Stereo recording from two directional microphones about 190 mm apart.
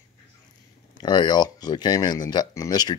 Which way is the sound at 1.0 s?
25° left (ahead or behind).